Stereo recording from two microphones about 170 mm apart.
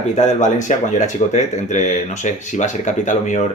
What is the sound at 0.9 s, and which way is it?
Speech, 45° left (ahead or behind).